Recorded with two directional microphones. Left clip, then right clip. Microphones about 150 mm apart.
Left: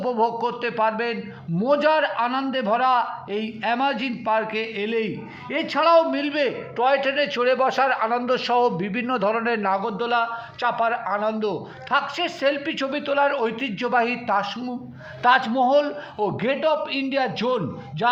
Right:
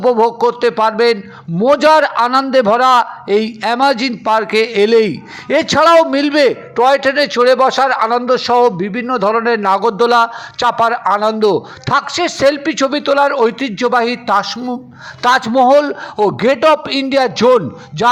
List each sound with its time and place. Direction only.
0.0 s a man's voice: 40° right (ahead or behind)
9.8 s a man's voice: 50° right (ahead or behind)